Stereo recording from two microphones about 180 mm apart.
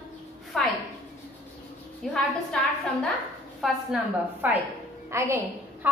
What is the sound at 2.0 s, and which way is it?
Speech, 5° left (ahead or behind).